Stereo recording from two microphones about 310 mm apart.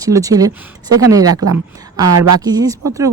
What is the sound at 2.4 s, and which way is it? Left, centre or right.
Speech, centre.